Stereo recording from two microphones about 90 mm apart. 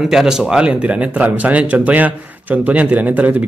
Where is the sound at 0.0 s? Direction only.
5° right (ahead or behind).